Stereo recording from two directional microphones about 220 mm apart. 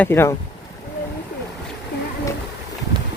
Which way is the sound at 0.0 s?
10° left (ahead or behind).